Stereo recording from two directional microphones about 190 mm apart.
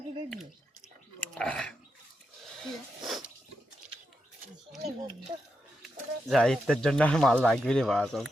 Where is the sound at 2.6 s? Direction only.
Centre (ahead or behind).